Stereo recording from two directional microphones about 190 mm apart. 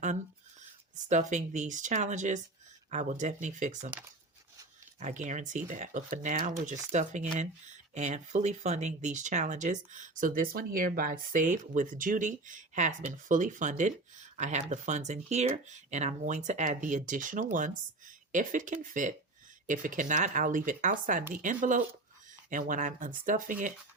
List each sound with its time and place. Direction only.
1.3 s speech: 40° right (ahead or behind)
4.9 s speech: 40° right (ahead or behind)